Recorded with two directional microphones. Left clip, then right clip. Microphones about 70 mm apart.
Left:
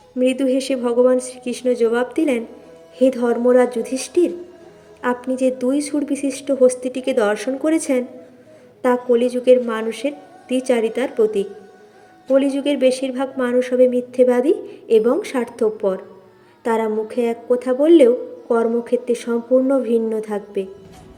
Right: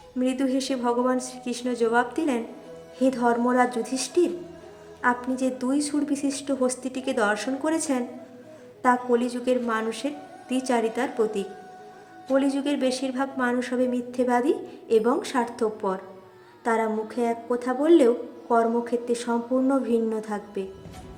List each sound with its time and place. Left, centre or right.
0.2 s a woman's voice: left